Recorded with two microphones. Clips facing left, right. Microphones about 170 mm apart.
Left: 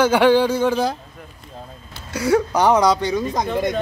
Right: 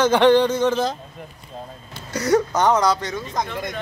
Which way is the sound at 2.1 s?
5° left (ahead or behind).